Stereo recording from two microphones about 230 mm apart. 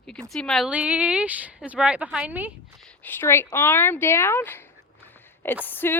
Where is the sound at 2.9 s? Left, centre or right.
Centre.